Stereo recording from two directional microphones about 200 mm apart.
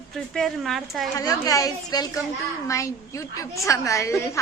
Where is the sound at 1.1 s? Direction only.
15° left (ahead or behind).